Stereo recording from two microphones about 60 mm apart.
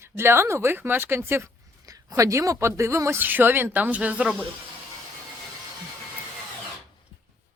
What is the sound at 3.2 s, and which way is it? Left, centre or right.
Speech, right.